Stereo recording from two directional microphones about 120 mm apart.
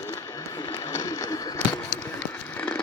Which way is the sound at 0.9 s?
25° left (ahead or behind).